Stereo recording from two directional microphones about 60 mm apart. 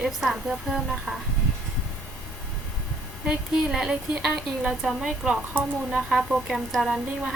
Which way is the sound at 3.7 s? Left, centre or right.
Centre.